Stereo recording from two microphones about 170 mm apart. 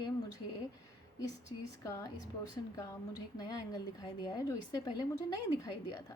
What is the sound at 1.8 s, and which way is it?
A woman's voice, 20° left (ahead or behind).